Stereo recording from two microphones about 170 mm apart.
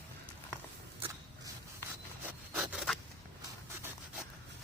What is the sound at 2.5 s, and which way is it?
Zipper, 5° right (ahead or behind).